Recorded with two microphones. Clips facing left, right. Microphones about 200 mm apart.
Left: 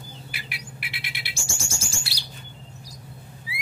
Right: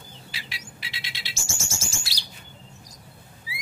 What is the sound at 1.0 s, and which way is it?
Music, 15° left (ahead or behind).